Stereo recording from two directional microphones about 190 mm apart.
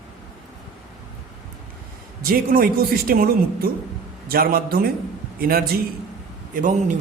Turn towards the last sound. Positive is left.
turn(degrees=-40)  # may be behind; listen again after turning